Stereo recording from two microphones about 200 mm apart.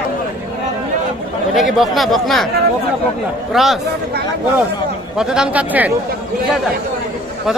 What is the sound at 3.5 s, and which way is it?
Speech, centre (ahead or behind).